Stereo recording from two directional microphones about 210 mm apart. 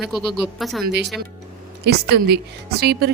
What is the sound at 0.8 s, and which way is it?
Speech, 55° right (ahead or behind).